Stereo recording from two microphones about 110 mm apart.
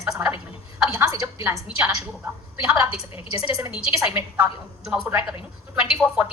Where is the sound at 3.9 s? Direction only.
20° right (ahead or behind).